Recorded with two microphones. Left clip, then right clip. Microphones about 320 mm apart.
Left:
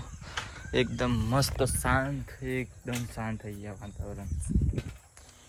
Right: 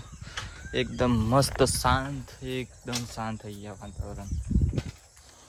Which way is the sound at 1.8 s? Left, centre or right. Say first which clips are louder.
Right 2 dB; centre.